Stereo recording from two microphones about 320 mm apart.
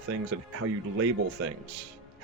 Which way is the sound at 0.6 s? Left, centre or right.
Right.